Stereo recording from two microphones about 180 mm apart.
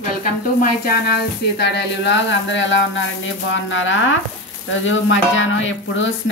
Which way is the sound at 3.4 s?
90° left.